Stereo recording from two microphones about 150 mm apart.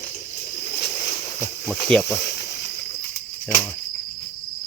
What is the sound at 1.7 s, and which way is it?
Speech, 5° left (ahead or behind).